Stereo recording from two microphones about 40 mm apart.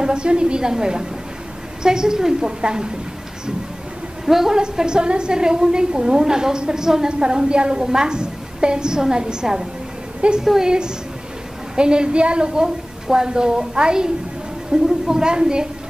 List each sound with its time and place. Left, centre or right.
0.0 s a woman's voice: right
4.3 s a woman's voice: centre
4.6 s a woman's voice: right
11.7 s a woman's voice: right